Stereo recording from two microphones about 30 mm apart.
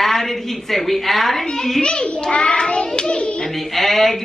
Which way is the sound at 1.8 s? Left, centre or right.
Left.